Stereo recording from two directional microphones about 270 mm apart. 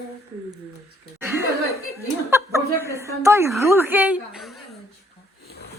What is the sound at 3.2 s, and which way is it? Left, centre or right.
A woman's voice, centre.